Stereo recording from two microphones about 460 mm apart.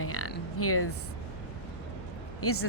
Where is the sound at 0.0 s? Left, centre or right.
Left.